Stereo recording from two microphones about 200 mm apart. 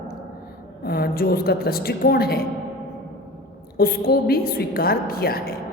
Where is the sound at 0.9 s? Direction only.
50° left (ahead or behind).